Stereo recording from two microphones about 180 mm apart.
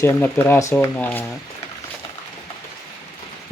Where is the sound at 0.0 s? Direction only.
15° left (ahead or behind).